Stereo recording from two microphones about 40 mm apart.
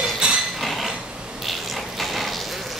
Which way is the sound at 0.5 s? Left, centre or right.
Centre.